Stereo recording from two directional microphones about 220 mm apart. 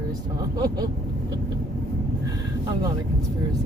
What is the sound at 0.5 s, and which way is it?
Speech, 20° right (ahead or behind).